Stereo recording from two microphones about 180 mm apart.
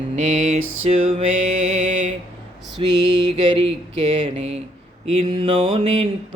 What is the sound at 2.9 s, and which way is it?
Mantra, 25° right (ahead or behind).